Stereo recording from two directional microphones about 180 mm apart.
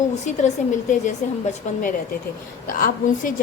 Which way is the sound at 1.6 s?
40° left (ahead or behind).